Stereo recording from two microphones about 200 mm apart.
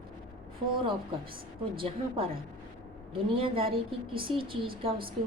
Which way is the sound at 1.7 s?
25° right (ahead or behind).